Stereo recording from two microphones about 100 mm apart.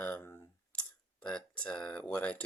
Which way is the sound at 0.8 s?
10° left (ahead or behind).